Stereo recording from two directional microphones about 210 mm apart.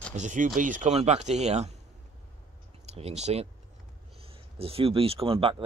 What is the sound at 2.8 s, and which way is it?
Speech, 30° right (ahead or behind).